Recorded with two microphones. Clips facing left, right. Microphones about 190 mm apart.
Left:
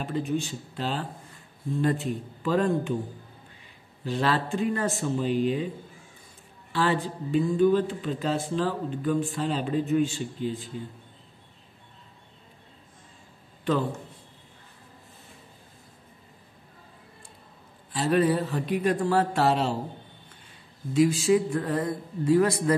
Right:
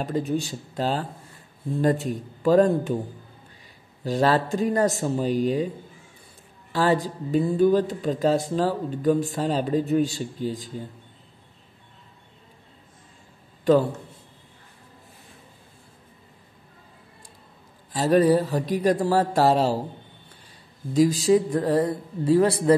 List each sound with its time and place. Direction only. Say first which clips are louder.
0.0 s speech: right 3 dB; 40° right (ahead or behind)
4.0 s speech: right 5 dB; 40° right (ahead or behind)
6.7 s speech: right 4 dB; 40° right (ahead or behind)
17.9 s speech: right 5 dB; 40° right (ahead or behind)
20.9 s speech: right 3 dB; 40° right (ahead or behind)